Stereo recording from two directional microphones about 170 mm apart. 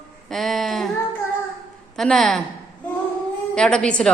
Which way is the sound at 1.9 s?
Centre (ahead or behind).